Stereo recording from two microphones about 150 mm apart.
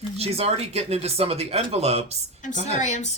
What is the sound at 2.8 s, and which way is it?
Speech, 50° left (ahead or behind).